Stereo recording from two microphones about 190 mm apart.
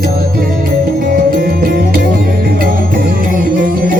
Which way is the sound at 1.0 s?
50° right (ahead or behind).